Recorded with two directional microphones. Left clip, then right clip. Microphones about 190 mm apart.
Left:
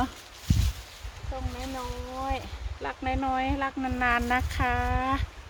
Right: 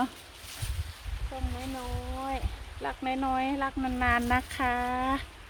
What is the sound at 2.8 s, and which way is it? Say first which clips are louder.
Speech: left 1 dB; 15° right (ahead or behind).